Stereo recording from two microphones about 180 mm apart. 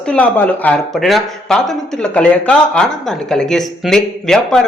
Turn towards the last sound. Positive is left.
turn(degrees=5)  # may be behind; listen again after turning